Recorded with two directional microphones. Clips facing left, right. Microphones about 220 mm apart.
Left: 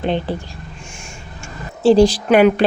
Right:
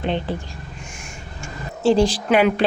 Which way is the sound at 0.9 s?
30° left (ahead or behind).